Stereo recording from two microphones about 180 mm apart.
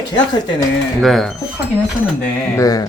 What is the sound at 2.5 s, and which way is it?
Speech, 20° left (ahead or behind).